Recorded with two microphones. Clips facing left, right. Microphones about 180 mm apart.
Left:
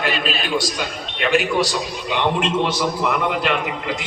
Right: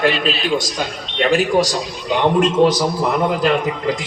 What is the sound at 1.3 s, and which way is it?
A man's voice, 40° right (ahead or behind).